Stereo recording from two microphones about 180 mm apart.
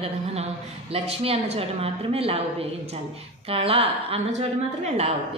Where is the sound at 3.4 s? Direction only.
30° right (ahead or behind).